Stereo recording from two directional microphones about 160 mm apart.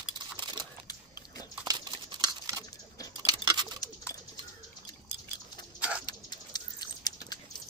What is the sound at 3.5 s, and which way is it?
Bird, 25° right (ahead or behind).